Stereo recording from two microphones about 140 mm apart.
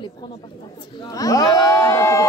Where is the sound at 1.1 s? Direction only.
25° left (ahead or behind).